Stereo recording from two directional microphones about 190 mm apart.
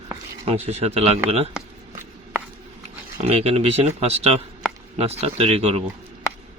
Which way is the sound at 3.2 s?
35° right (ahead or behind).